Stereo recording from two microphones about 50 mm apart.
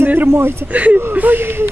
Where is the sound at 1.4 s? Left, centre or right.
Right.